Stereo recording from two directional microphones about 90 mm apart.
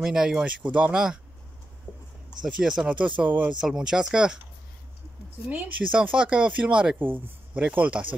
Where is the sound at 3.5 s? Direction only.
5° right (ahead or behind).